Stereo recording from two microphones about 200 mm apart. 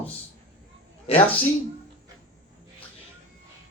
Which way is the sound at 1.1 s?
30° left (ahead or behind).